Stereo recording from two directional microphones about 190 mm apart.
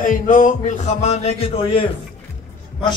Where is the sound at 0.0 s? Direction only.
45° left (ahead or behind).